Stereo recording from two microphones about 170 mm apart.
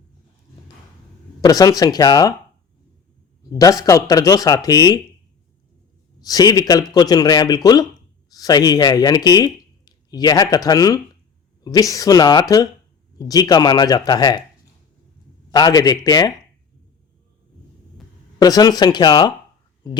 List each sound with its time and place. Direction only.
1.4 s speech: 20° left (ahead or behind)
3.5 s speech: 20° left (ahead or behind)
6.1 s speech: 20° left (ahead or behind)
15.5 s speech: 25° left (ahead or behind)
18.3 s speech: 20° left (ahead or behind)